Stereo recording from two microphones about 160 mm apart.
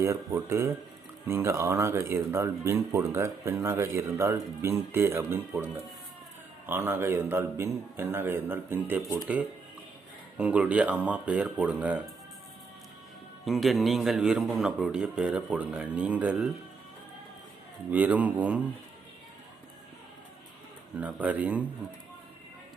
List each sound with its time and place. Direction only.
0.0 s speech: 15° right (ahead or behind)
6.7 s speech: 15° right (ahead or behind)
13.4 s a man's voice: centre (ahead or behind)
17.9 s speech: 10° right (ahead or behind)
20.9 s speech: 10° right (ahead or behind)